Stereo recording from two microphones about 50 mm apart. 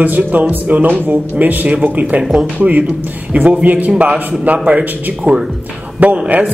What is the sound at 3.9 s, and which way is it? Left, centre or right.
Speech, centre.